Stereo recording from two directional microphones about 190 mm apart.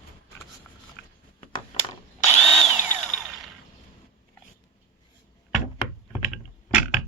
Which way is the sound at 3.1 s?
Centre (ahead or behind).